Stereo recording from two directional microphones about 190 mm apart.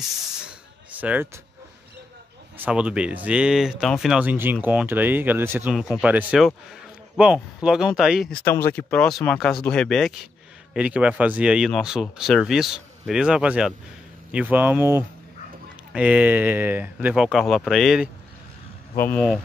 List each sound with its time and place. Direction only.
0.4 s a sound: 5° right (ahead or behind)
2.5 s speech: 10° right (ahead or behind)
5.8 s speech: centre (ahead or behind)
8.5 s speech: 10° left (ahead or behind)